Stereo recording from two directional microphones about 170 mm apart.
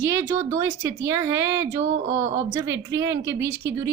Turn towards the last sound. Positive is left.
turn(degrees=-15)  # may be behind; listen again after turning